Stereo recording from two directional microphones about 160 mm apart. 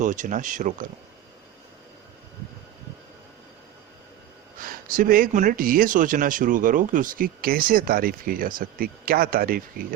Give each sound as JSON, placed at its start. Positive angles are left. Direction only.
{"t": 0.0, "sound": "speech", "side_deg": -55}
{"t": 4.6, "sound": "speech", "side_deg": -60}